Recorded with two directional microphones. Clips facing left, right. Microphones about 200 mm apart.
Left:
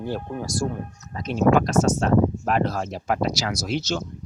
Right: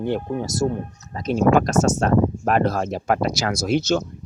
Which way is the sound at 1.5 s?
45° right (ahead or behind).